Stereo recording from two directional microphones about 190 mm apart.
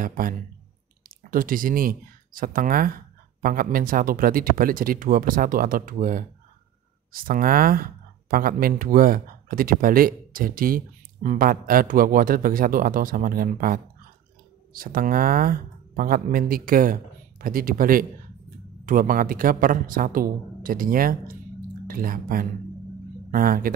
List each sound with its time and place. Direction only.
0.0 s speech: 50° right (ahead or behind)
14.8 s speech: 50° right (ahead or behind)